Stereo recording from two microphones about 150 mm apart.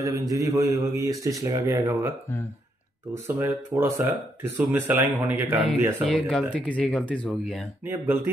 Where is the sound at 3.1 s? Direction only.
20° right (ahead or behind).